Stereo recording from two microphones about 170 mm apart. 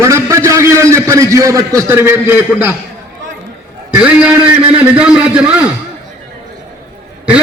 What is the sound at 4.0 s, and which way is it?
A man's voice, 5° right (ahead or behind).